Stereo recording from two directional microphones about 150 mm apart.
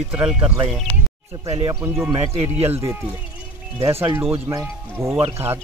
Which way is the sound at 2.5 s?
45° right (ahead or behind).